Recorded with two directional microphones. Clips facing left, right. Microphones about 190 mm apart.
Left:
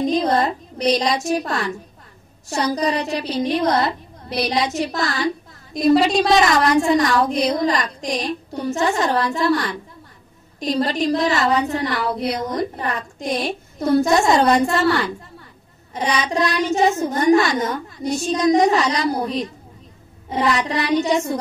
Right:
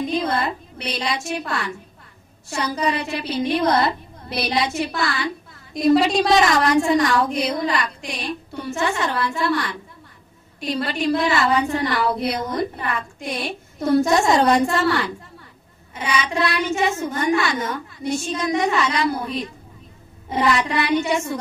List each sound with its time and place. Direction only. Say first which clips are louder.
0.0 s a woman's voice: left 4 dB; 40° left (ahead or behind)